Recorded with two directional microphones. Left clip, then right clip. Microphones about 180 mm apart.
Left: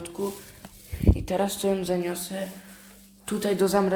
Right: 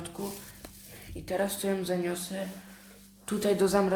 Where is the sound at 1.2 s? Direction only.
25° left (ahead or behind).